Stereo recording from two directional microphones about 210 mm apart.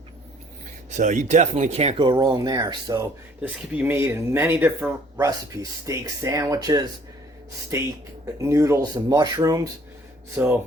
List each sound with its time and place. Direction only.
0.9 s speech: 35° right (ahead or behind); by 10.6 s 5° right (ahead or behind)